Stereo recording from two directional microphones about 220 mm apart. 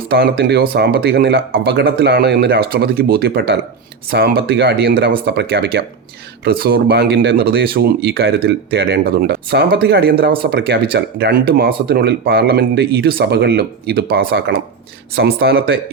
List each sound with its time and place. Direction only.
0.1 s speech: 45° right (ahead or behind)